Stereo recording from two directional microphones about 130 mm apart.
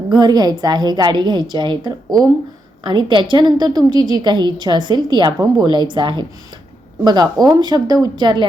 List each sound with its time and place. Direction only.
0.1 s a woman's voice: 35° right (ahead or behind)